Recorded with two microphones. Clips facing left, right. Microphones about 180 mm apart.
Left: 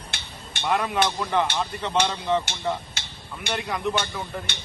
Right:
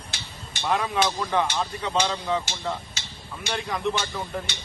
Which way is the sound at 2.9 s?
60° left (ahead or behind).